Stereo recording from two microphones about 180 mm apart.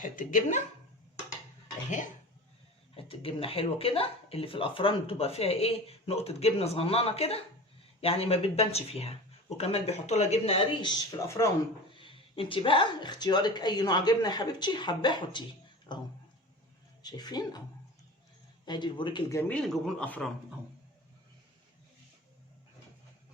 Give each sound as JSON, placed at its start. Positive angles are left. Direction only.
{"t": 0.0, "sound": "speech", "side_deg": 45}
{"t": 2.9, "sound": "a woman's voice", "side_deg": 30}
{"t": 11.9, "sound": "a sound", "side_deg": 30}
{"t": 12.4, "sound": "a woman's voice", "side_deg": 30}
{"t": 18.6, "sound": "a woman's voice", "side_deg": 25}
{"t": 19.4, "sound": "a man's voice", "side_deg": 5}